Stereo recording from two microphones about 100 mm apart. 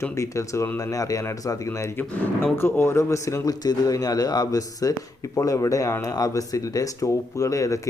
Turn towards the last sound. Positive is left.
turn(degrees=35)  # may be behind; listen again after turning